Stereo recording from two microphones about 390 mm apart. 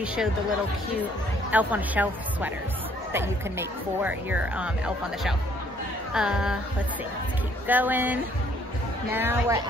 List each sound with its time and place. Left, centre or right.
0.0 s speech: centre
1.5 s speech: centre
7.6 s speech: centre